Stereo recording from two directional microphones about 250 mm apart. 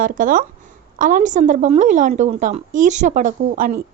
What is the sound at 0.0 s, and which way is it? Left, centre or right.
A woman's voice, right.